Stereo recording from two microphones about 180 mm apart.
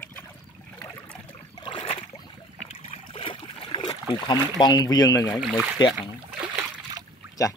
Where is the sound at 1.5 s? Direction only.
25° left (ahead or behind).